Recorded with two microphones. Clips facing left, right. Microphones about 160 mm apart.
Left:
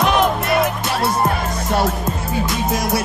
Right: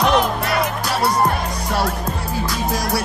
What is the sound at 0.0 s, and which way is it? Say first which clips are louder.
Music: left 1 dB; centre (ahead or behind).